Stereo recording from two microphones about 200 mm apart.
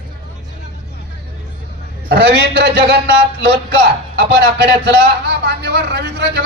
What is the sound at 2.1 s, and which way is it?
A man's voice, 60° right (ahead or behind).